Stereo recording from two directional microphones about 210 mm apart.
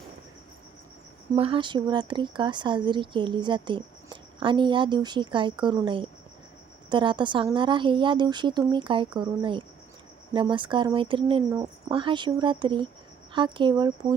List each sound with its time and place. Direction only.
1.4 s speech: 25° right (ahead or behind)